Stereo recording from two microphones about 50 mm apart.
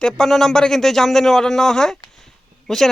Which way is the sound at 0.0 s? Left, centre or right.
Centre.